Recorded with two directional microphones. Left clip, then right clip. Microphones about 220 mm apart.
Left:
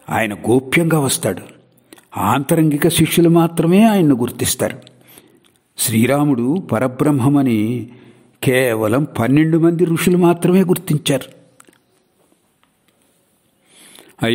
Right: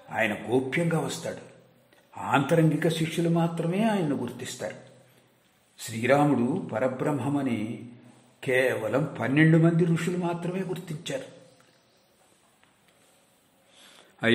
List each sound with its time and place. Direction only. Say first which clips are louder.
0.1 s speech: left 10 dB; 50° left (ahead or behind)
5.8 s speech: left 7 dB; 50° left (ahead or behind)
13.7 s a sound: left 12 dB; 25° left (ahead or behind)